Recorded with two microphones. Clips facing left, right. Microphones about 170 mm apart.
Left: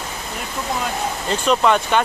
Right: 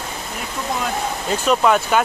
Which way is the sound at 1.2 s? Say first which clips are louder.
Even; 5° right (ahead or behind).